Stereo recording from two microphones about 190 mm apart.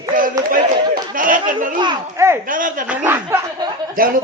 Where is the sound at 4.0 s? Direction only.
50° right (ahead or behind).